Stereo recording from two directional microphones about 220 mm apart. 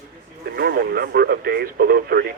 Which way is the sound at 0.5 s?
45° right (ahead or behind).